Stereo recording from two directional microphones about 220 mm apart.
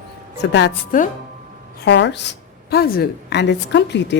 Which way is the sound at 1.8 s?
55° left (ahead or behind).